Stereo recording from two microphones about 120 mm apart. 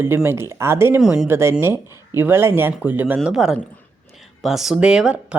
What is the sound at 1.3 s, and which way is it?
Speech, 20° right (ahead or behind).